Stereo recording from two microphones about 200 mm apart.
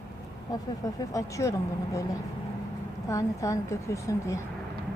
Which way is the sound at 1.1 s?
15° left (ahead or behind).